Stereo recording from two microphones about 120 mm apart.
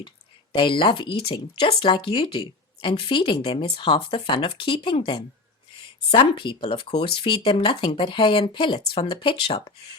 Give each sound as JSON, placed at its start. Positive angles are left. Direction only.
{"t": 0.5, "sound": "speech", "side_deg": 45}